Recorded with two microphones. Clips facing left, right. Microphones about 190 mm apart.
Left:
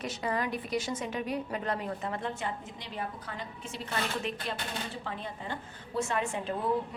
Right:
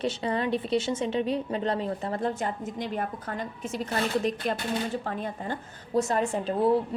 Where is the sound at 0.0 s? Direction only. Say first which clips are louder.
Right 5 dB; 30° right (ahead or behind).